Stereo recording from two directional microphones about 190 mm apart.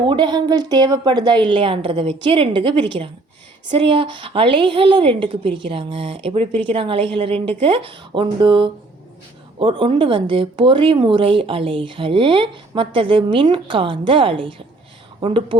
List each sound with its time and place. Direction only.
0.0 s speech: 25° right (ahead or behind)